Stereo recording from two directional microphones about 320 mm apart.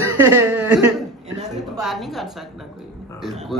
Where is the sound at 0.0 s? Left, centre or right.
Centre.